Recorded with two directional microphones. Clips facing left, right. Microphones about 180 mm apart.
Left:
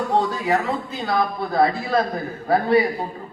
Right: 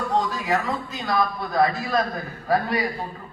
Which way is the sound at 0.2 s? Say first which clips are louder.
Left 3 dB; 30° left (ahead or behind).